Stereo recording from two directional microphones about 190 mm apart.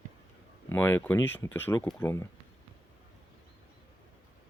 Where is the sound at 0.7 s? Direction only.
10° left (ahead or behind).